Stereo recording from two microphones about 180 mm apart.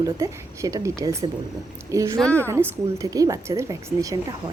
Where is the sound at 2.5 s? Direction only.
15° right (ahead or behind).